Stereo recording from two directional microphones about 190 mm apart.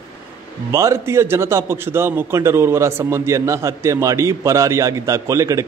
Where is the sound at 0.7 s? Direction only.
15° right (ahead or behind).